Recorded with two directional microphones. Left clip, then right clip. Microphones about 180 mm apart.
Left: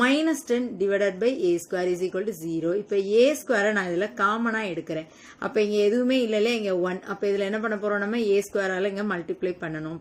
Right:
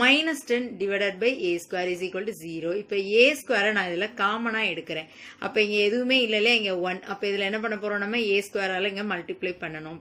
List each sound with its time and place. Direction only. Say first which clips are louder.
0.0 s a woman's voice: right 1 dB; 50° left (ahead or behind)